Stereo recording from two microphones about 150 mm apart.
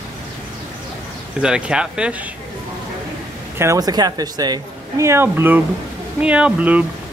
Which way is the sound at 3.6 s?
20° right (ahead or behind).